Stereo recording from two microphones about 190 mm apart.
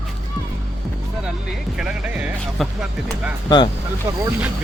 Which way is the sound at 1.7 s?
5° right (ahead or behind).